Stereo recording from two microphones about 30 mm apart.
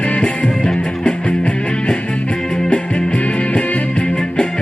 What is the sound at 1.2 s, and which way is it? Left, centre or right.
Music, left.